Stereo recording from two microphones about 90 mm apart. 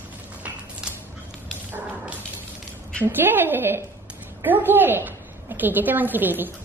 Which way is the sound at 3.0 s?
25° right (ahead or behind).